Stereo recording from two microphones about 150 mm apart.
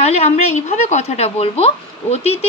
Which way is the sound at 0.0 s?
45° left (ahead or behind).